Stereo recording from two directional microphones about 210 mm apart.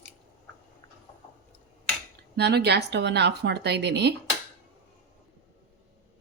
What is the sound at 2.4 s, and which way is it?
A woman's voice, 55° right (ahead or behind).